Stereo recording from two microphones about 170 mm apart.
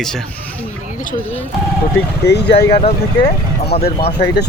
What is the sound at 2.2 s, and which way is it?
Speech, 80° left.